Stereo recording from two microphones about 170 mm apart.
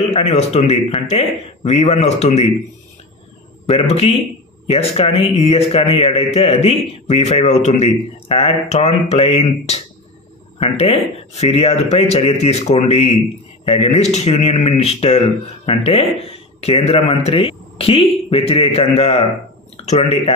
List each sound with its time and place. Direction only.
0.1 s speech: 40° left (ahead or behind)
3.6 s speech: 35° left (ahead or behind)